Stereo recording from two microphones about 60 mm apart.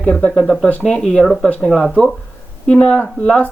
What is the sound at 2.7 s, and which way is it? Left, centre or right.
Speech, left.